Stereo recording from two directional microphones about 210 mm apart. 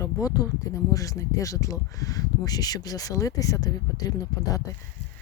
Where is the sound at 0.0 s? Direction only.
15° left (ahead or behind).